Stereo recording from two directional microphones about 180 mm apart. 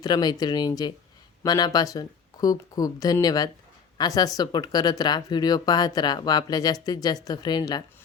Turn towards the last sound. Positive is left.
turn(degrees=25)  # may be behind; listen again after turning